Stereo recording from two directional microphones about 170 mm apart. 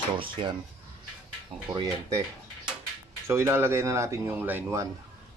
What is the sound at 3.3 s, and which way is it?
Speech, 15° right (ahead or behind).